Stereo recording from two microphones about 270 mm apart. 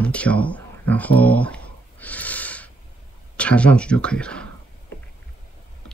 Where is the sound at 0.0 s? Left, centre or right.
Centre.